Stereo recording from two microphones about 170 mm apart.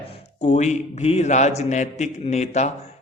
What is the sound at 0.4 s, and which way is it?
A man's voice, 45° left (ahead or behind).